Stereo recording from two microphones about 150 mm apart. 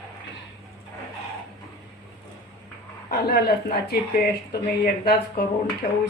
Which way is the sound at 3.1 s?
90° left.